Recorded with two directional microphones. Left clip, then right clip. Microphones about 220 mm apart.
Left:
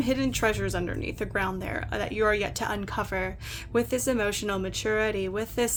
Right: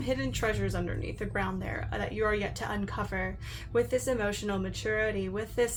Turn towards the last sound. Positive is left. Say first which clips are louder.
# left 2 dB
turn(degrees=45)  # may be behind; listen again after turning